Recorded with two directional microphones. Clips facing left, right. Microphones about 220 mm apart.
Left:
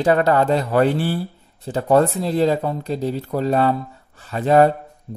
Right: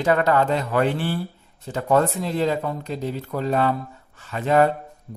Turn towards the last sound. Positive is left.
turn(degrees=35)  # may be behind; listen again after turning